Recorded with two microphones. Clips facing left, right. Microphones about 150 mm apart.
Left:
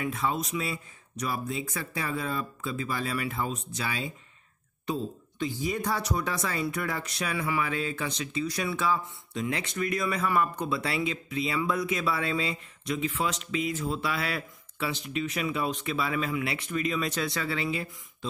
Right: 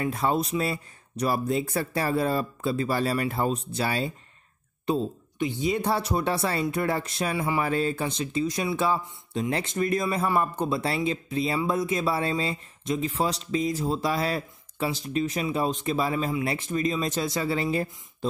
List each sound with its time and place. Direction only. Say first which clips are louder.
0.0 s speech: right 4 dB; 40° right (ahead or behind)
8.5 s speech: right 2 dB; 25° right (ahead or behind); by 17.8 s 40° right (ahead or behind)